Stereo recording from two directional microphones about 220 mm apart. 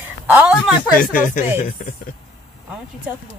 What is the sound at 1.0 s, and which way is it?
Speech, 40° left (ahead or behind).